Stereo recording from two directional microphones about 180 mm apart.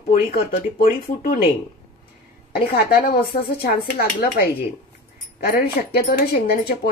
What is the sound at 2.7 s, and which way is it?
Speech, 55° left (ahead or behind).